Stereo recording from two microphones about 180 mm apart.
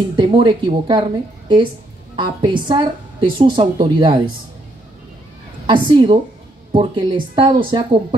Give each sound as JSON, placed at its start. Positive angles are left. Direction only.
{"t": 0.1, "sound": "a woman's voice", "side_deg": -25}
{"t": 5.7, "sound": "a woman's voice", "side_deg": -25}